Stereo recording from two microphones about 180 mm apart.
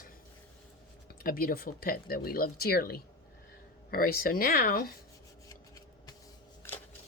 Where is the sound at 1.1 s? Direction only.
55° left (ahead or behind).